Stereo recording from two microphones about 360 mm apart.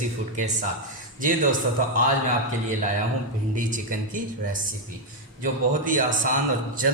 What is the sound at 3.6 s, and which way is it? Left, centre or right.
A man's voice, right.